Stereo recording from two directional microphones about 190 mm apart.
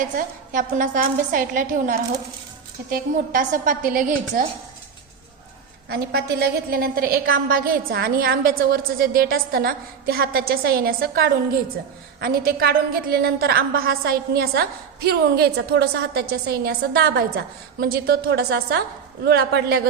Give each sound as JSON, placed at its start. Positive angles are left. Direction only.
{"t": 0.0, "sound": "a woman's voice", "side_deg": -45}
{"t": 5.9, "sound": "a woman's voice", "side_deg": -55}